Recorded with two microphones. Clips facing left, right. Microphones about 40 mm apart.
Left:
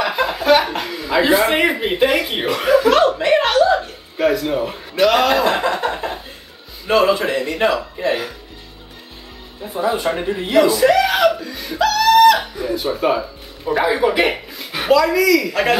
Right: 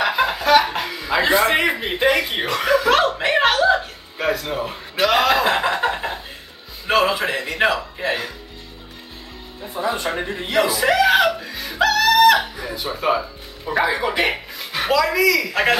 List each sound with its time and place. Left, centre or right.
0.0 s a sound: centre
0.4 s a sound: centre
0.8 s speech: centre
2.9 s speech: centre
4.2 s speech: centre
9.8 s speech: centre
10.7 s speech: centre
12.5 s speech: centre
15.1 s speech: centre